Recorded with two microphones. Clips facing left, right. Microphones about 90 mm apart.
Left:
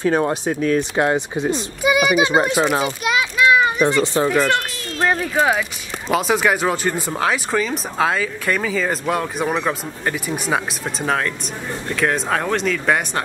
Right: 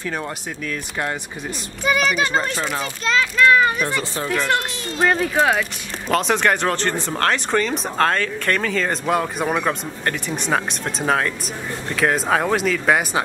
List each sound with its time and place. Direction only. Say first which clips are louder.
0.0 s speech: left 9 dB; 30° left (ahead or behind)
0.7 s speech: left 8 dB; 20° left (ahead or behind)
1.8 s a child's voice: left 3 dB; 10° left (ahead or behind)
4.3 s a child's voice: left 3 dB; 10° left (ahead or behind)